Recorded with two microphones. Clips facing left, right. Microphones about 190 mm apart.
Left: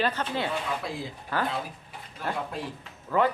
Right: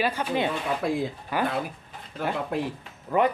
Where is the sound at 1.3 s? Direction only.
15° right (ahead or behind).